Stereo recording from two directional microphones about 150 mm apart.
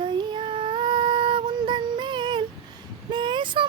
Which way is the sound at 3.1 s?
30° right (ahead or behind).